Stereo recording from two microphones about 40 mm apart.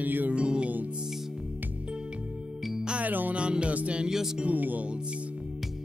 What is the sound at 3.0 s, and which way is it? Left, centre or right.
Music, right.